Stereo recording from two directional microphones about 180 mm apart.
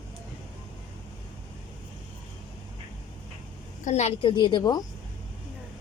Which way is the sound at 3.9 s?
35° left (ahead or behind).